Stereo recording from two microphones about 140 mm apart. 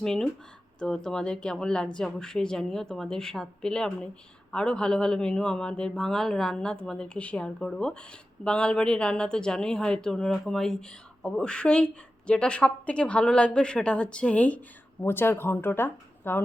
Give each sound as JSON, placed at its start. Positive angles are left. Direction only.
{"t": 0.0, "sound": "a woman's voice", "side_deg": 5}